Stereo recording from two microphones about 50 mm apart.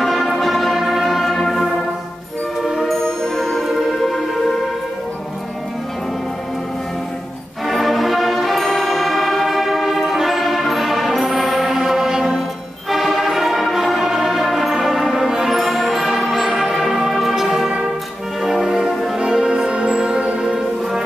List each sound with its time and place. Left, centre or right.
0.0 s music: centre
7.6 s music: centre; by 20.5 s right